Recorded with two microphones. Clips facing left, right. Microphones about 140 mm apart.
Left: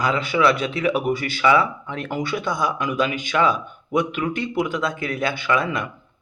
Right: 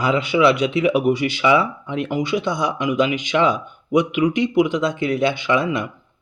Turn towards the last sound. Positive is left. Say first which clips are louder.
# right 2 dB
turn(degrees=-25)  # may be behind; listen again after turning